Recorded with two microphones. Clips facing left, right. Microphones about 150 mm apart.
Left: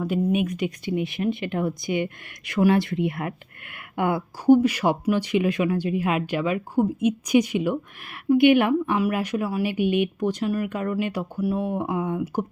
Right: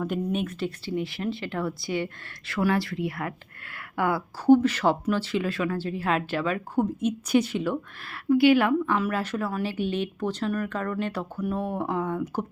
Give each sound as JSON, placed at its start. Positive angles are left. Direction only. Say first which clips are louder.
{"t": 0.3, "sound": "speech", "louder": "left 5 dB", "side_deg": 10}